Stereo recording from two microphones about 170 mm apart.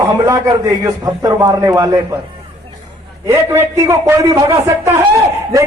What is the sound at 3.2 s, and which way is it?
A man's voice, 15° right (ahead or behind).